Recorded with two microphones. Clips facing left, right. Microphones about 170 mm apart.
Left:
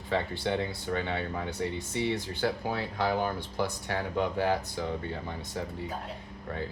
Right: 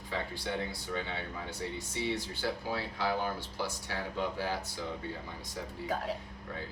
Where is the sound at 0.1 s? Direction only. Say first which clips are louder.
Left 7 dB; 65° left (ahead or behind).